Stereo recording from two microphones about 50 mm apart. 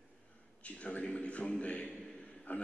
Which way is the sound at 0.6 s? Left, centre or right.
Left.